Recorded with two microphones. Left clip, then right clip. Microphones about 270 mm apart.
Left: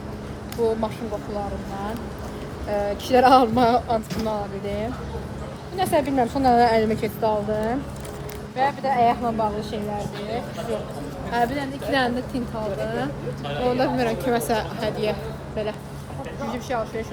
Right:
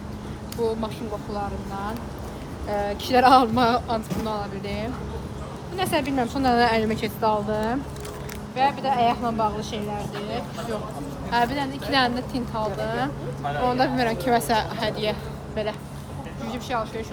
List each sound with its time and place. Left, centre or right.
2.6 s speech: centre
11.3 s speech: centre
16.5 s speech: centre